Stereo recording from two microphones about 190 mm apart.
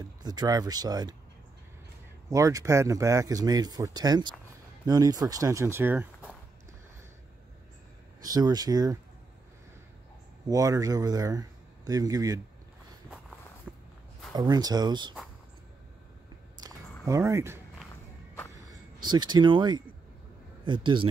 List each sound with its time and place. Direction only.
0.2 s speech: 20° right (ahead or behind)
2.2 s speech: 15° right (ahead or behind)
8.2 s speech: 20° right (ahead or behind)
10.5 s speech: 20° right (ahead or behind)
13.7 s walk: centre (ahead or behind)
14.3 s speech: 20° right (ahead or behind)
16.5 s a sound: 20° right (ahead or behind)
18.7 s speech: 20° right (ahead or behind)